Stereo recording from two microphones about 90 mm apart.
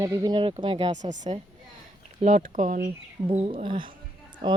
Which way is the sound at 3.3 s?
70° right (ahead or behind).